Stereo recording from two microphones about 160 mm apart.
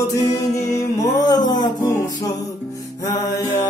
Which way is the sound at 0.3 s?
20° left (ahead or behind).